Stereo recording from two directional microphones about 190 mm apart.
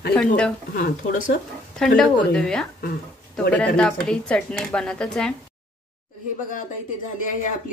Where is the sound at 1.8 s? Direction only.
5° left (ahead or behind).